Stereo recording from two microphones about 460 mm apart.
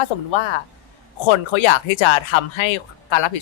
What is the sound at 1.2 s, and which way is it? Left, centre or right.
Speech, left.